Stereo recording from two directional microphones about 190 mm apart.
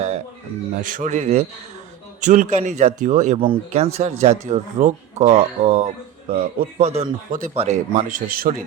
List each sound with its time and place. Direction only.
0.8 s speech: 45° right (ahead or behind)